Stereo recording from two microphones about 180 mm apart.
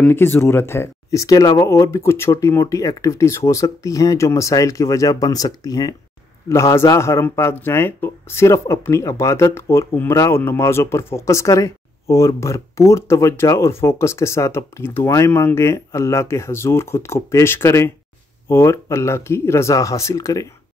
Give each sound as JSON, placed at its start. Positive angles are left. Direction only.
{"t": 0.0, "sound": "speech", "side_deg": 10}